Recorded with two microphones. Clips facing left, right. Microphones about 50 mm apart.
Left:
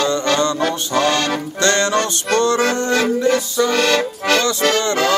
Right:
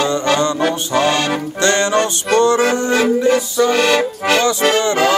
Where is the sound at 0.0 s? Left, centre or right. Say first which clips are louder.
Right 1 dB; centre.